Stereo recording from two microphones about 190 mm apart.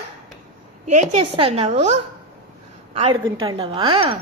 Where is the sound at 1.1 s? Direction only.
30° right (ahead or behind).